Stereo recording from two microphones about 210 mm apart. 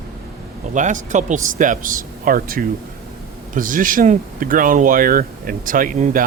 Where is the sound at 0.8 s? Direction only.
35° right (ahead or behind).